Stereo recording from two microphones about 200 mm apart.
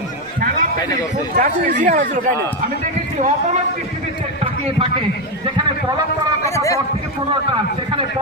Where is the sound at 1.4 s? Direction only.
40° right (ahead or behind).